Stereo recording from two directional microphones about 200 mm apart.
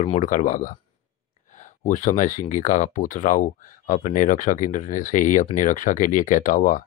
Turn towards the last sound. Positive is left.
turn(degrees=40)  # may be behind; listen again after turning